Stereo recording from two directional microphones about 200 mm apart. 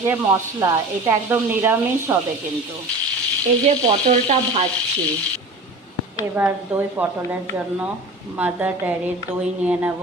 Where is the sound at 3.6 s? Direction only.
35° right (ahead or behind).